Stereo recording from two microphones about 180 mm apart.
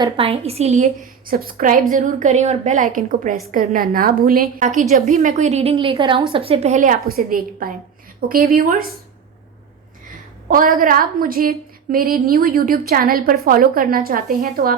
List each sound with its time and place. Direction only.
0.0 s a woman's voice: 30° right (ahead or behind)
1.3 s a woman's voice: 55° right (ahead or behind)
10.5 s a woman's voice: 50° right (ahead or behind)